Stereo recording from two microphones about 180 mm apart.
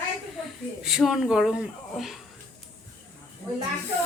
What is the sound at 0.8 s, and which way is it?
Speech, centre (ahead or behind).